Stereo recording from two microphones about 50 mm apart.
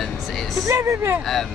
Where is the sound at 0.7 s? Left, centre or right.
Right.